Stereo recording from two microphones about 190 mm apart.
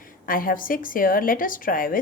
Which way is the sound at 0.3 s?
50° left (ahead or behind).